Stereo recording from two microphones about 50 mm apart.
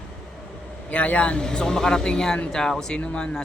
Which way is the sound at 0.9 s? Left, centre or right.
Left.